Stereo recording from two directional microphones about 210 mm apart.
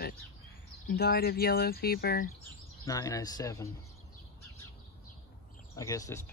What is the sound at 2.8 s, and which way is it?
Speech, 15° left (ahead or behind).